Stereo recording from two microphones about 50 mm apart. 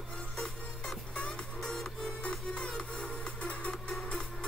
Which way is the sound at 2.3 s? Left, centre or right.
Left.